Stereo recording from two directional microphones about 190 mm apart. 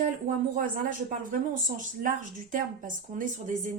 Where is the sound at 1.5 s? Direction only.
45° right (ahead or behind).